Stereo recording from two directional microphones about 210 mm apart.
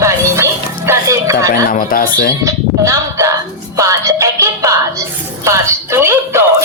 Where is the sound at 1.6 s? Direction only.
40° left (ahead or behind).